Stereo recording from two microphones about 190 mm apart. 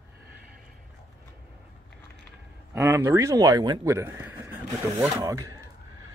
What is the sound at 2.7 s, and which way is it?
Speech, 15° right (ahead or behind).